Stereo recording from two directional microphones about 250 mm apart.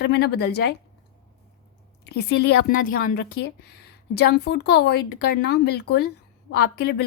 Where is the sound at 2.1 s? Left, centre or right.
Left.